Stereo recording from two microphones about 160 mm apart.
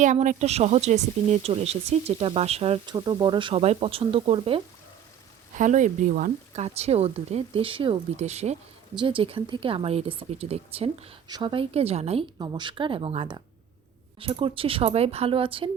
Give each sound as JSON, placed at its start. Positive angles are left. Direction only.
{"t": 0.0, "sound": "speech", "side_deg": -50}
{"t": 5.5, "sound": "speech", "side_deg": -50}
{"t": 6.7, "sound": "speech", "side_deg": -40}
{"t": 9.0, "sound": "speech", "side_deg": -35}
{"t": 11.3, "sound": "speech", "side_deg": -30}